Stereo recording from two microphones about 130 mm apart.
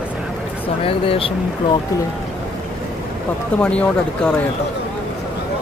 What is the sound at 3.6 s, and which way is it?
Speech, 10° left (ahead or behind).